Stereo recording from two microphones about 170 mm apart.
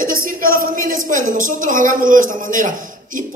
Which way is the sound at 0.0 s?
55° right (ahead or behind).